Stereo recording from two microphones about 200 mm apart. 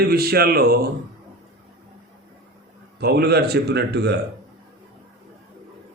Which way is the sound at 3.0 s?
55° right (ahead or behind).